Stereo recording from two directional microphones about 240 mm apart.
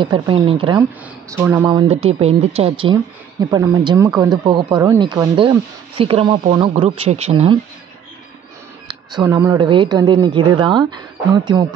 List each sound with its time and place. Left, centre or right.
0.0 s speech: centre
1.3 s speech: centre; by 7.5 s right
8.8 s speech: centre